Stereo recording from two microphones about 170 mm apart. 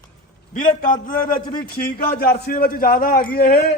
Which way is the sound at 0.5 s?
50° left (ahead or behind).